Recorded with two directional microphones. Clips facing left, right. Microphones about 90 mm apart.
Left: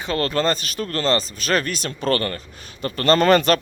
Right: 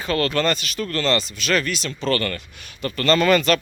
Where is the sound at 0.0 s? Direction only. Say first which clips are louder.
Even; 25° left (ahead or behind); by 2.2 s 45° left (ahead or behind).